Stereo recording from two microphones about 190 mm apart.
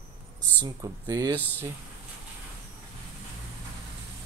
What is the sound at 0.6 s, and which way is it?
Speech, 20° right (ahead or behind).